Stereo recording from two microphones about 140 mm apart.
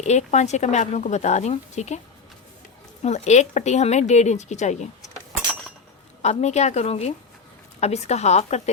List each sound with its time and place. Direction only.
0.0 s speech: 55° left (ahead or behind)
3.0 s speech: 55° left (ahead or behind)
6.2 s a woman's voice: 55° left (ahead or behind)